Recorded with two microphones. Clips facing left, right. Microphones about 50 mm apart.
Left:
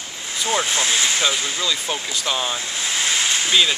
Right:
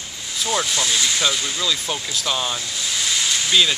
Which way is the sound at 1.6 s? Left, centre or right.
Centre.